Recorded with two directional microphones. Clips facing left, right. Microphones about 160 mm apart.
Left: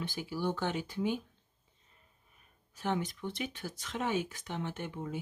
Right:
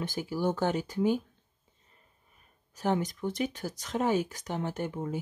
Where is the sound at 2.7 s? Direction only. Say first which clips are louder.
Right 5 dB; 40° right (ahead or behind).